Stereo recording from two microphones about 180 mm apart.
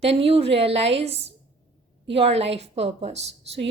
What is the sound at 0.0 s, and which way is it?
A woman's voice, 35° right (ahead or behind).